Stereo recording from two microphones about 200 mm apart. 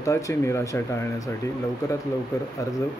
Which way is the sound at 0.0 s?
15° left (ahead or behind).